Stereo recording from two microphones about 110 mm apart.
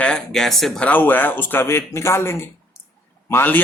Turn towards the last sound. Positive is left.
turn(degrees=20)  # may be behind; listen again after turning